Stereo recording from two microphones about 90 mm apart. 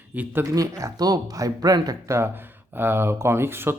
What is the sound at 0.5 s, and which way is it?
Speech, 40° right (ahead or behind).